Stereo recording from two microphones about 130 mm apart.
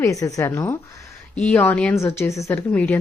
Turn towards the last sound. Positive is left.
turn(degrees=10)  # may be behind; listen again after turning